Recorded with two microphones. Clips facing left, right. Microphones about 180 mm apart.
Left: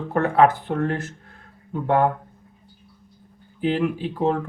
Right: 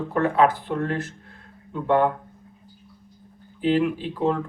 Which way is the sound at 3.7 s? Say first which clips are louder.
Right 1 dB; 45° left (ahead or behind).